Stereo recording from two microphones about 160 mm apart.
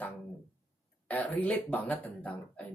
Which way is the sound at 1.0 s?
10° left (ahead or behind).